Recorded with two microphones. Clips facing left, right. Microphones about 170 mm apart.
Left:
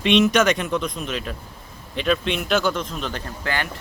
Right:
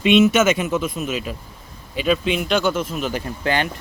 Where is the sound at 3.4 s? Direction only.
20° right (ahead or behind).